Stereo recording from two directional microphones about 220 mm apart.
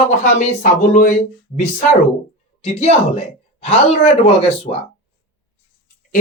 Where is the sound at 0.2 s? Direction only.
35° left (ahead or behind).